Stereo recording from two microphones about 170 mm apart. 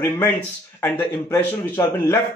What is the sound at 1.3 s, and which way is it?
Speech, 15° left (ahead or behind).